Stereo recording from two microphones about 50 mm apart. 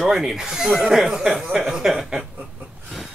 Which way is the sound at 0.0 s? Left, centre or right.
Centre.